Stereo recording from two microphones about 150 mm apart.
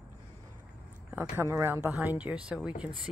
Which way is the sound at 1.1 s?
15° right (ahead or behind).